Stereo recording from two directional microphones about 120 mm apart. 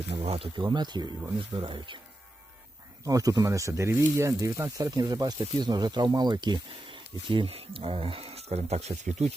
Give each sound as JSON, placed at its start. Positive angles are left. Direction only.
{"t": 0.1, "sound": "speech", "side_deg": -55}
{"t": 3.0, "sound": "speech", "side_deg": -30}